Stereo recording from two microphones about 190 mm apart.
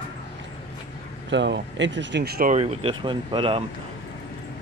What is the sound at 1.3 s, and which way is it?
Speech, 70° right (ahead or behind).